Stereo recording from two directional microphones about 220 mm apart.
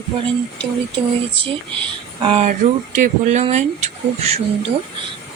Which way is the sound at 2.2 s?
25° right (ahead or behind).